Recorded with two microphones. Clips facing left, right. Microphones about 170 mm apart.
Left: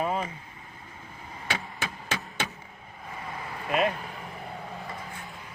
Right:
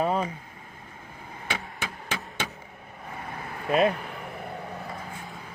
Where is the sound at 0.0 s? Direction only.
40° right (ahead or behind).